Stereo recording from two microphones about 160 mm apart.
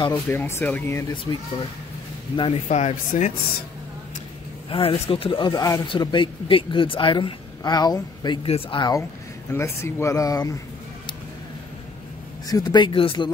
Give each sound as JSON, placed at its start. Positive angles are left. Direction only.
{"t": 0.3, "sound": "speech", "side_deg": 15}
{"t": 1.3, "sound": "a woman's voice", "side_deg": 25}
{"t": 2.7, "sound": "speech", "side_deg": 45}
{"t": 4.6, "sound": "a woman's voice", "side_deg": 35}
{"t": 8.5, "sound": "a woman's voice", "side_deg": 35}
{"t": 9.5, "sound": "speech", "side_deg": 15}
{"t": 12.4, "sound": "speech", "side_deg": 25}